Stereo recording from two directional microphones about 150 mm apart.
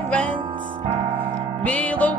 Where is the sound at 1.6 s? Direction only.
10° left (ahead or behind).